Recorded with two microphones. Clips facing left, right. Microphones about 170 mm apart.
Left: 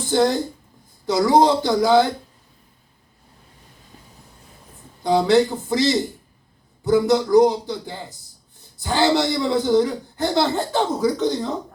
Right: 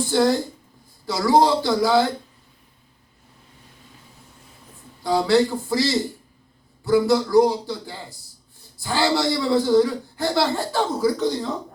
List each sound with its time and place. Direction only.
0.1 s a man's voice: 20° left (ahead or behind)
5.0 s a man's voice: 20° left (ahead or behind)